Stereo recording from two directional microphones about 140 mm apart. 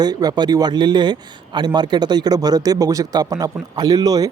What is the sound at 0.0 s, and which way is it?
Speech, 30° right (ahead or behind).